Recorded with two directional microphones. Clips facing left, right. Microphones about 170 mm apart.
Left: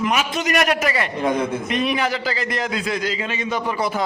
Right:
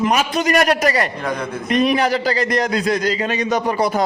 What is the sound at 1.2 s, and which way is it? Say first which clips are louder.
Speech: left 3 dB; 25° left (ahead or behind).